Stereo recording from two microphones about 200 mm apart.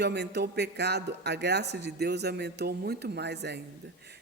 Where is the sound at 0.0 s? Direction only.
55° right (ahead or behind).